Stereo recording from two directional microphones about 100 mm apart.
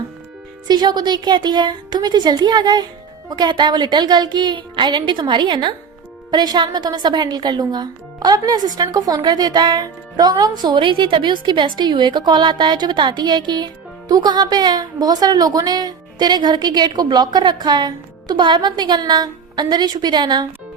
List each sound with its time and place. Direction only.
0.7 s a woman's voice: 45° right (ahead or behind)
10.8 s a woman's voice: 55° right (ahead or behind)